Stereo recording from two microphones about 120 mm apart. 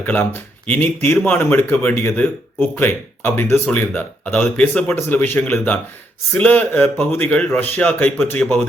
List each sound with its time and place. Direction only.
0.0 s speech: 15° left (ahead or behind)